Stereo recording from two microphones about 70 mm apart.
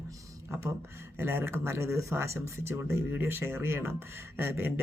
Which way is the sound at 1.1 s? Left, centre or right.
Right.